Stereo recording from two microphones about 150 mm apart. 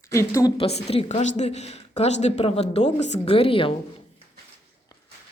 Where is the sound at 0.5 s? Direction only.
40° left (ahead or behind).